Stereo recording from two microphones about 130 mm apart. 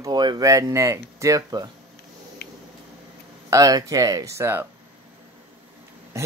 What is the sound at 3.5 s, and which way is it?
Speech, 25° right (ahead or behind).